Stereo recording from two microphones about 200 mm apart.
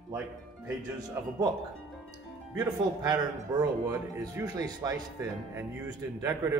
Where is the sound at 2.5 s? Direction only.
20° right (ahead or behind).